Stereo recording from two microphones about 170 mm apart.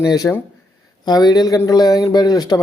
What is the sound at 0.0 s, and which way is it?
Speech, 20° left (ahead or behind).